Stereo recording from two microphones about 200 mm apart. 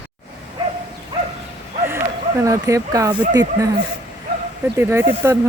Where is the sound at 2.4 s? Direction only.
15° right (ahead or behind).